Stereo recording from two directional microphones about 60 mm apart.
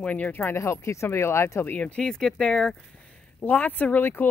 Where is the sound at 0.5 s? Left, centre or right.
Left.